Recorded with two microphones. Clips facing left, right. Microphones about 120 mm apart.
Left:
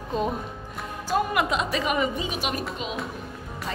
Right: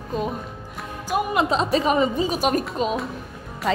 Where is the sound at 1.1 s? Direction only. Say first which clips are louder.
Right 3 dB; 25° right (ahead or behind); by 3.0 s 40° right (ahead or behind).